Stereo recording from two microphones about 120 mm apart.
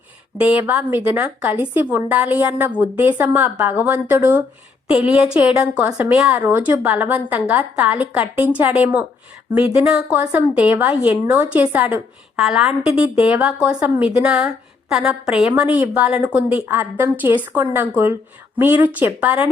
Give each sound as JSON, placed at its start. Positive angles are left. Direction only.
{"t": 0.3, "sound": "a woman's voice", "side_deg": -10}